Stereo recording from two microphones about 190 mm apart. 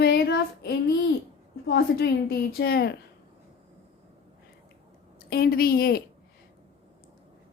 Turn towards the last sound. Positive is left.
turn(degrees=55)  # may be behind; listen again after turning